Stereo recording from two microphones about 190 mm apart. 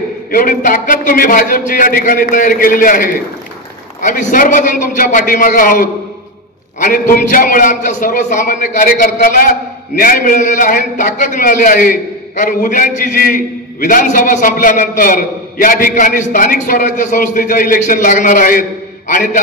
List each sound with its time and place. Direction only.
0.3 s a man's voice: 45° left (ahead or behind)